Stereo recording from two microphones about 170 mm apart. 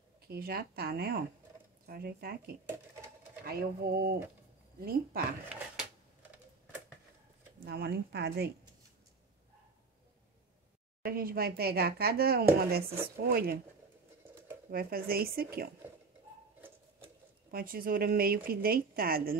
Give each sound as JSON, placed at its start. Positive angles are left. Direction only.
{"t": 0.3, "sound": "speech", "side_deg": -65}
{"t": 7.6, "sound": "speech", "side_deg": -75}
{"t": 11.1, "sound": "speech", "side_deg": -60}
{"t": 14.7, "sound": "speech", "side_deg": -60}
{"t": 17.5, "sound": "speech", "side_deg": -60}